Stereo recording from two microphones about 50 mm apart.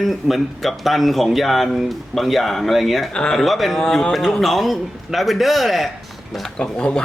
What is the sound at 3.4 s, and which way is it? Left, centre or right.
A man's voice, centre.